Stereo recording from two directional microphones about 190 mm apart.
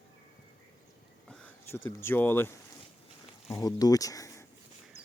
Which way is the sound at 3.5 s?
20° left (ahead or behind).